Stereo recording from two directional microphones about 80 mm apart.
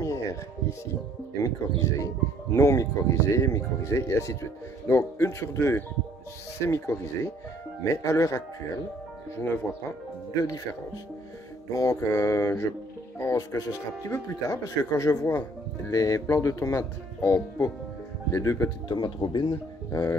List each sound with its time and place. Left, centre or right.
0.0 s music: left
1.4 s speech: left
10.4 s speech: left
18.9 s speech: left
19.9 s speech: left